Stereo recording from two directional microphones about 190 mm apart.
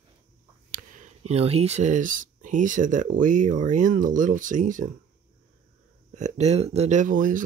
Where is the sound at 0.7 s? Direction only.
40° right (ahead or behind).